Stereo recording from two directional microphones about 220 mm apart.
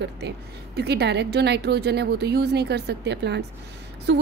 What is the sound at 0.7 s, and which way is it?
A woman's voice, 50° right (ahead or behind).